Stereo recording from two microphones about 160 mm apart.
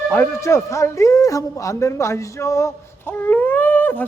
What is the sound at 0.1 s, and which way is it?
A man's voice, 15° left (ahead or behind).